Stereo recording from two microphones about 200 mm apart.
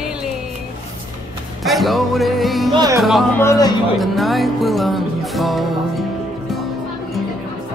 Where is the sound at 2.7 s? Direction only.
20° right (ahead or behind).